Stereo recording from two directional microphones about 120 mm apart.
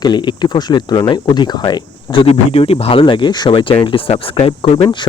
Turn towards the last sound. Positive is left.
turn(degrees=40)  # may be behind; listen again after turning